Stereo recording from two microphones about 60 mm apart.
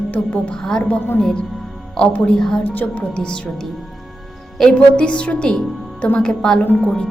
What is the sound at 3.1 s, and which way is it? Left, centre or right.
A woman's voice, centre.